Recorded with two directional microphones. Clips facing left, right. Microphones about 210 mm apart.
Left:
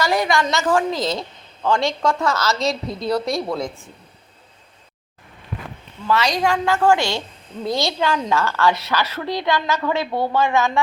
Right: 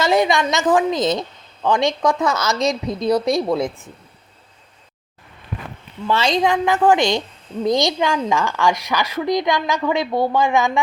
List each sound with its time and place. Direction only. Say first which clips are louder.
0.0 s a woman's voice: right 3 dB; 20° right (ahead or behind)
6.1 s a woman's voice: right 1 dB; 25° right (ahead or behind)